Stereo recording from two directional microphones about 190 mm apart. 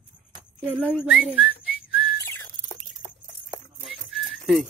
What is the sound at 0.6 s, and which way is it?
Speech, 5° right (ahead or behind).